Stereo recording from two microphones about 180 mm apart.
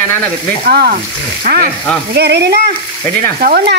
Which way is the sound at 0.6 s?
55° right (ahead or behind).